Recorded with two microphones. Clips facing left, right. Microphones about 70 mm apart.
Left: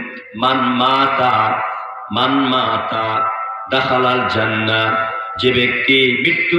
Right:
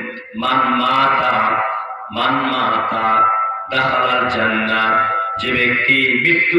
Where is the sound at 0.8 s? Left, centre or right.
Left.